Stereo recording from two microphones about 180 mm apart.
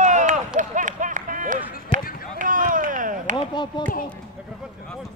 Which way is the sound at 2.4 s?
50° right (ahead or behind).